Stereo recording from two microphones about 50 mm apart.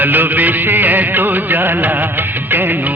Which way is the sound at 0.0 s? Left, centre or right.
Right.